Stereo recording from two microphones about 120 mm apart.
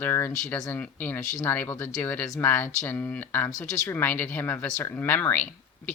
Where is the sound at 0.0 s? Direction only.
20° left (ahead or behind).